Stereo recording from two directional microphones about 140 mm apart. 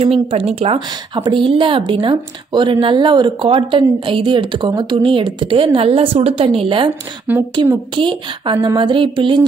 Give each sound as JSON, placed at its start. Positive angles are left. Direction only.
{"t": 0.3, "sound": "a woman's voice", "side_deg": -45}
{"t": 7.3, "sound": "speech", "side_deg": -15}
{"t": 7.9, "sound": "a woman's voice", "side_deg": -35}